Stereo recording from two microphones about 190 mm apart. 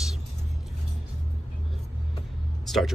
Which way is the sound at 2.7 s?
Centre (ahead or behind).